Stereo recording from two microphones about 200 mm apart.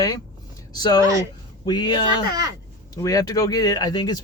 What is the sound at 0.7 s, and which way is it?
Speech, 20° left (ahead or behind).